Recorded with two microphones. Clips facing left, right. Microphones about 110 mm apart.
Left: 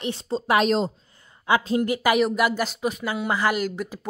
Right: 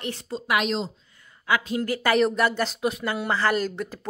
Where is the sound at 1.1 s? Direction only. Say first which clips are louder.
Left 1 dB; 30° left (ahead or behind).